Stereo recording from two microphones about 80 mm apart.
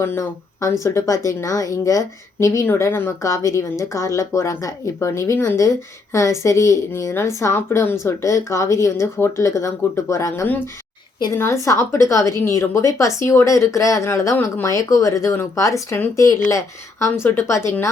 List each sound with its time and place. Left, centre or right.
0.0 s a woman's voice: left
2.6 s speech: left
3.2 s a woman's voice: left